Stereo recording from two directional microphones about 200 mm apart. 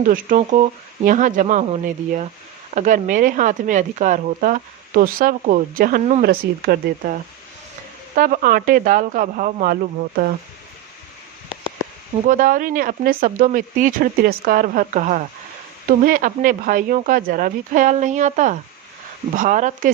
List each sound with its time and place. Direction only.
0.0 s speech: 40° right (ahead or behind)
12.3 s speech: 45° right (ahead or behind)